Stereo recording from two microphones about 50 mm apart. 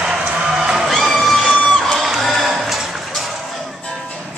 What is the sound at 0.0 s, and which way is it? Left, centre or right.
Music, centre.